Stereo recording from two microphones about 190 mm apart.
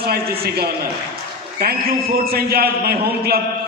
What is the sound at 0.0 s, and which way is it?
A man's voice, 55° right (ahead or behind).